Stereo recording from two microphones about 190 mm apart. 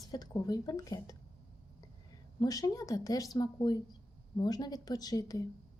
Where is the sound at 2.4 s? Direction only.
20° left (ahead or behind).